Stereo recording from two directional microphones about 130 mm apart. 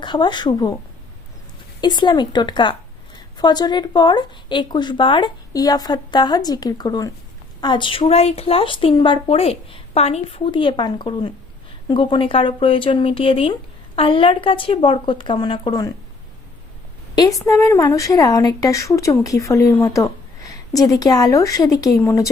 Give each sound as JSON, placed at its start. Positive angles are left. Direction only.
{"t": 0.0, "sound": "speech", "side_deg": 35}
{"t": 1.8, "sound": "a woman's voice", "side_deg": 35}
{"t": 17.2, "sound": "a woman's voice", "side_deg": 25}